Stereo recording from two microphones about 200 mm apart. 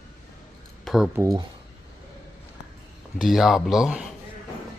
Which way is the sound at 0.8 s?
Centre (ahead or behind).